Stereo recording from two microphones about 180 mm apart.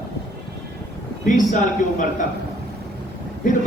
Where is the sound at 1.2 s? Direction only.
45° left (ahead or behind).